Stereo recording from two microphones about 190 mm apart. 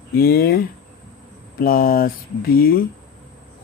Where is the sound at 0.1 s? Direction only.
50° left (ahead or behind).